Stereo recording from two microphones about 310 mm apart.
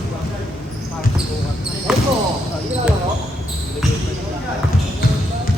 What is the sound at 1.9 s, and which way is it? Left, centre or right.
Basketball bounce, centre.